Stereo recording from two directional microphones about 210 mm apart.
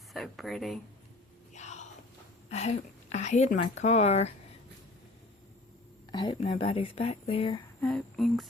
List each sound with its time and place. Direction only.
0.1 s speech: centre (ahead or behind)
1.5 s a sound: 35° left (ahead or behind)
2.5 s speech: 30° left (ahead or behind)
6.1 s speech: 20° left (ahead or behind)
7.8 s speech: 5° left (ahead or behind)